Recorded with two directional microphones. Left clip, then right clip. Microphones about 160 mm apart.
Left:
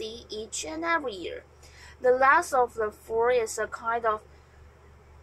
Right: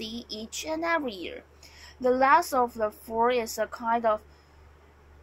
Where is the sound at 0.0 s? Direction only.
45° right (ahead or behind).